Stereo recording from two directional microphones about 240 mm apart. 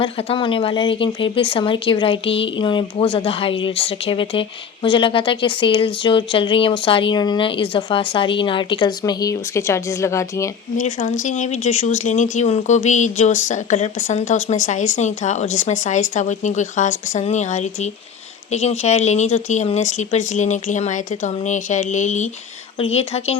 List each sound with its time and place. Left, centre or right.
0.0 s speech: left
10.8 s speech: left